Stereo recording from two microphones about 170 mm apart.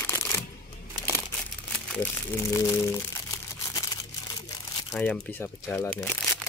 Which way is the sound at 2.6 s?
15° left (ahead or behind).